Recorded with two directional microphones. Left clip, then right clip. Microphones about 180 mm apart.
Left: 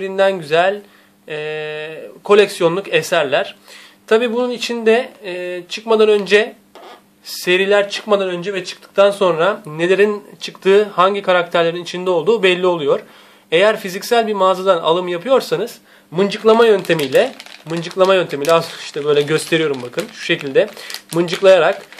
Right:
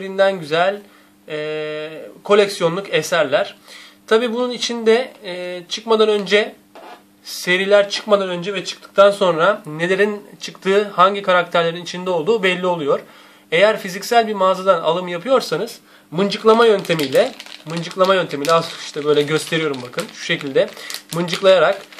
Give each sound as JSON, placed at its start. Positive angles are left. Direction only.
{"t": 0.0, "sound": "speech", "side_deg": 35}